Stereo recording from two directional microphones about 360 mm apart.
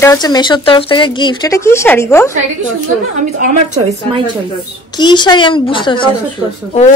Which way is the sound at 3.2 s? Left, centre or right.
Right.